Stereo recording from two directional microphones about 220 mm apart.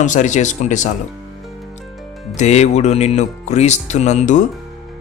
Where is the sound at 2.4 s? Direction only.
30° left (ahead or behind).